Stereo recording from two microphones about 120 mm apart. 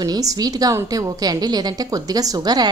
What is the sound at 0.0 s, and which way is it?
A woman's voice, 30° right (ahead or behind).